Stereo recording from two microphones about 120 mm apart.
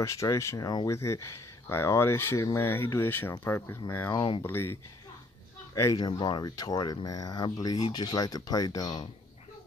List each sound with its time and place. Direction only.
0.0 s speech: 25° left (ahead or behind)
4.1 s speech: 40° left (ahead or behind)
4.4 s speech: 20° left (ahead or behind)
5.9 s speech: 35° left (ahead or behind)